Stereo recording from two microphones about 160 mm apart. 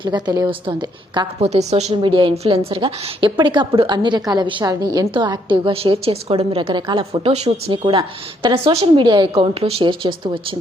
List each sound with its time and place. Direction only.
0.0 s a woman's voice: 25° right (ahead or behind)
1.4 s a woman's voice: 40° right (ahead or behind)